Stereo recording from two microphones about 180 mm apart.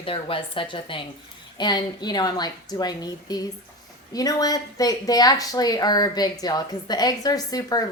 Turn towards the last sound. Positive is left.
turn(degrees=20)  # may be behind; listen again after turning